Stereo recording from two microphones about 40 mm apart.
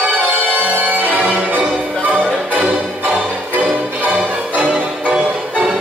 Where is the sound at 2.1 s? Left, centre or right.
Centre.